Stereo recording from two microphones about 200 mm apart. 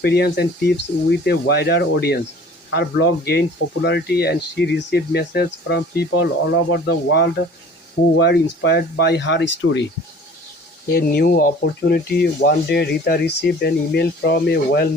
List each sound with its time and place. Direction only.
0.0 s speech: 55° left (ahead or behind)
10.8 s speech: 55° left (ahead or behind)